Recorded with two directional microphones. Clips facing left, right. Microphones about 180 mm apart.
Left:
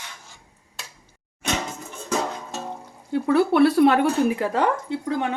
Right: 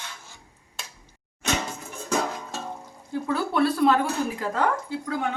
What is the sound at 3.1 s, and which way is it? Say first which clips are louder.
Speech: left 7 dB; 70° left (ahead or behind).